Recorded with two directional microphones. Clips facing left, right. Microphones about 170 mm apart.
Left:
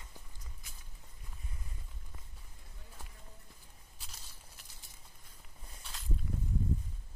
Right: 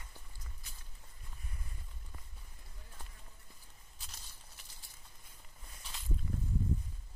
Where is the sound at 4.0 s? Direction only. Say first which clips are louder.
Even; 5° left (ahead or behind).